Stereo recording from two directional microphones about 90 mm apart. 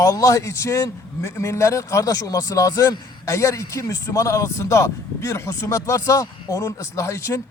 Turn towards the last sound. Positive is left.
turn(degrees=30)  # may be behind; listen again after turning